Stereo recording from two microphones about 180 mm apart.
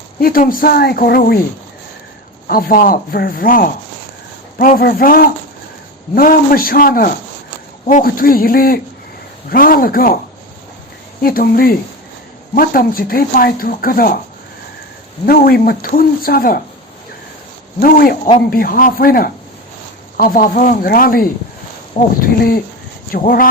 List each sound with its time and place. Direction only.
0.2 s a man's voice: 55° left (ahead or behind)
2.5 s speech: 55° left (ahead or behind)
11.2 s a man's voice: 55° left (ahead or behind)
15.3 s a man's voice: 55° left (ahead or behind)
17.7 s speech: 50° left (ahead or behind)